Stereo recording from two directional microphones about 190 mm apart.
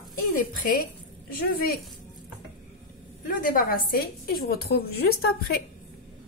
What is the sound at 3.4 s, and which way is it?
A woman's voice, 50° left (ahead or behind).